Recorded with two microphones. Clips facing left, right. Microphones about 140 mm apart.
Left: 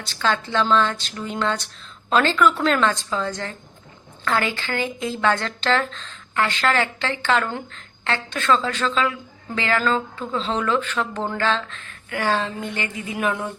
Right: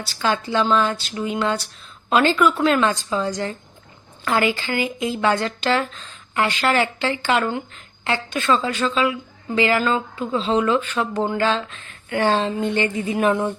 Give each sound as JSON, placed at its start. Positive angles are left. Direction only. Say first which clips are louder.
{"t": 0.0, "sound": "speech", "louder": "right 1 dB", "side_deg": -10}